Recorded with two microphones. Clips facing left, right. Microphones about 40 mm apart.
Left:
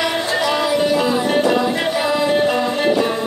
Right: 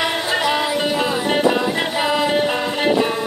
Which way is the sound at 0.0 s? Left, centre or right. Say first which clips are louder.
Left 1 dB; right.